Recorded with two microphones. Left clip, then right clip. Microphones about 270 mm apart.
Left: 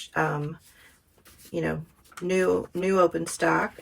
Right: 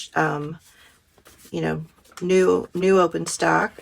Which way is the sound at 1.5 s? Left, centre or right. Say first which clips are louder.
Right 3 dB; right.